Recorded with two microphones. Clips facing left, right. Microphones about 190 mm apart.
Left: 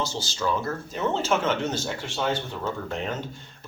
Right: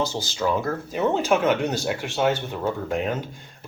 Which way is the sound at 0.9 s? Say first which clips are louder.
Right 4 dB; 15° right (ahead or behind).